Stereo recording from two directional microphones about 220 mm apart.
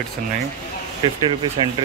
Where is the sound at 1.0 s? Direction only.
20° right (ahead or behind).